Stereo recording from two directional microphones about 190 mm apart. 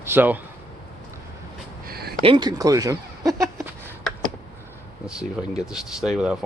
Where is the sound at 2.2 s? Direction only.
25° right (ahead or behind).